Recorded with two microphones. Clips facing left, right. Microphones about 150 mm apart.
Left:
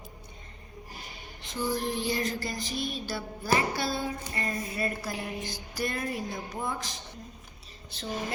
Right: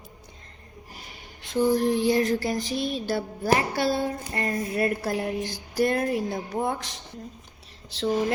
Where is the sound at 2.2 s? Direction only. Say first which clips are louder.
Right 8 dB; 65° right (ahead or behind).